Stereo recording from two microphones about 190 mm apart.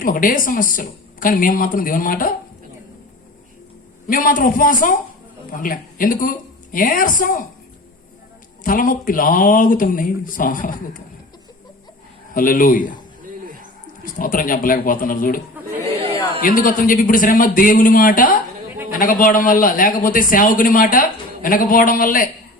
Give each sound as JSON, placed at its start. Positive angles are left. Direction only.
{"t": 0.0, "sound": "a man's voice", "side_deg": 45}
{"t": 4.0, "sound": "a man's voice", "side_deg": 45}
{"t": 8.6, "sound": "a man's voice", "side_deg": 45}
{"t": 12.3, "sound": "a man's voice", "side_deg": 45}
{"t": 14.0, "sound": "a man's voice", "side_deg": 45}
{"t": 16.4, "sound": "a man's voice", "side_deg": 45}